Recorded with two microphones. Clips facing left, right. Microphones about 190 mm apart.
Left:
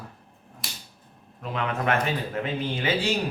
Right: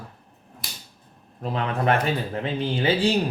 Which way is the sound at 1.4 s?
35° right (ahead or behind).